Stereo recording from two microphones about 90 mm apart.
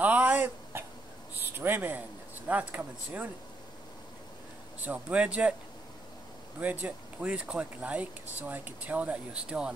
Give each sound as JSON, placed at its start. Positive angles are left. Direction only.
{"t": 0.0, "sound": "a sound", "side_deg": -15}
{"t": 1.4, "sound": "speech", "side_deg": -25}
{"t": 4.8, "sound": "speech", "side_deg": -15}
{"t": 6.6, "sound": "speech", "side_deg": -20}